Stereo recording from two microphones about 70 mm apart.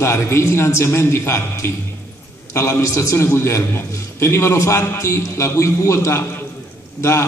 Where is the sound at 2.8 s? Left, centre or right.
Left.